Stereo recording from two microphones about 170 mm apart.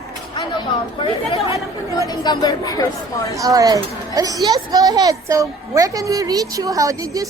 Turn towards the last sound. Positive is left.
turn(degrees=-20)  # may be behind; listen again after turning